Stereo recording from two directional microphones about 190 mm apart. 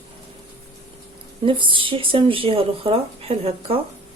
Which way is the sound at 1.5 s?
25° right (ahead or behind).